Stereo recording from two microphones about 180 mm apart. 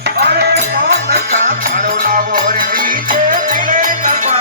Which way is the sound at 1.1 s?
50° right (ahead or behind).